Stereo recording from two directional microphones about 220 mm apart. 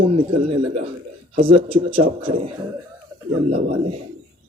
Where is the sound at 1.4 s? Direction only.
25° right (ahead or behind).